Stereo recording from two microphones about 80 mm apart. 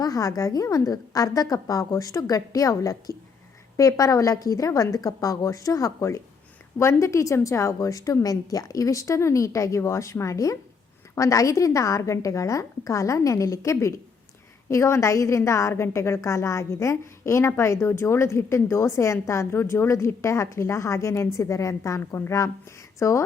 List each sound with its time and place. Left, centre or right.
0.0 s a woman's voice: left